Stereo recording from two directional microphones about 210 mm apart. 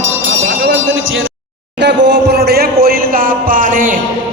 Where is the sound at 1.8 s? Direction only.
55° right (ahead or behind).